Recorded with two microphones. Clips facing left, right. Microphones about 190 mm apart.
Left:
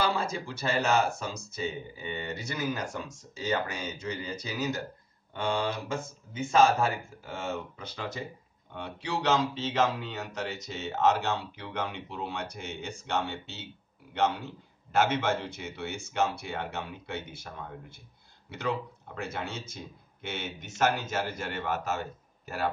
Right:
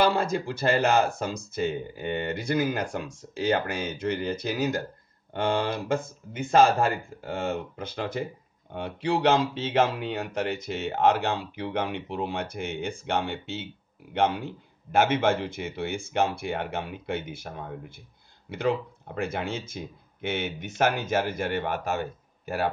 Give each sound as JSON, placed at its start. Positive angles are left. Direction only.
{"t": 0.0, "sound": "speech", "side_deg": -55}